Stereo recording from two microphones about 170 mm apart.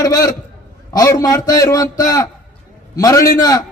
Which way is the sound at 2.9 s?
20° left (ahead or behind).